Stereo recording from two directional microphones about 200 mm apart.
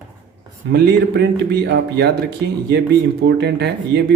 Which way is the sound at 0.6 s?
55° right (ahead or behind).